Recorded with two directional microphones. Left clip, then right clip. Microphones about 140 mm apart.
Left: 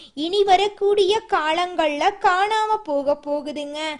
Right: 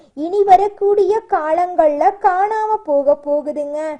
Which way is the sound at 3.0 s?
5° left (ahead or behind).